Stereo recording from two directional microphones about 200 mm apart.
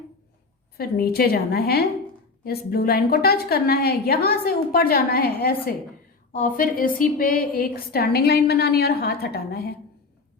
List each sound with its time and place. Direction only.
0.8 s a woman's voice: 50° left (ahead or behind)